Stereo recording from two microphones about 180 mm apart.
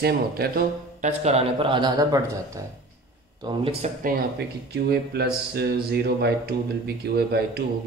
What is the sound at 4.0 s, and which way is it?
Speech, 60° right (ahead or behind).